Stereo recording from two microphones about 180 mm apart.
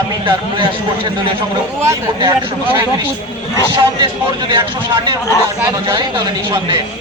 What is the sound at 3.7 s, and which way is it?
Speech, 25° right (ahead or behind).